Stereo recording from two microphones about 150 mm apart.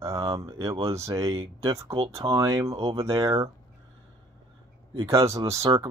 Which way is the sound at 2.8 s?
40° right (ahead or behind).